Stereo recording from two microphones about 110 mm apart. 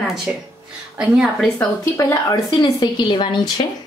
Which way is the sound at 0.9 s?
10° right (ahead or behind).